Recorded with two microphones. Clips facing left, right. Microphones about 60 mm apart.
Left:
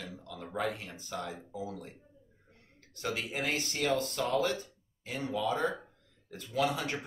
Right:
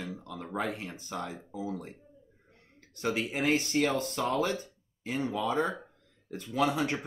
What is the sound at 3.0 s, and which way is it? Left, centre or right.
Speech, right.